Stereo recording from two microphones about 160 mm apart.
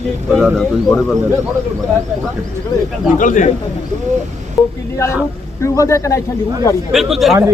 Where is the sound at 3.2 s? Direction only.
55° left (ahead or behind).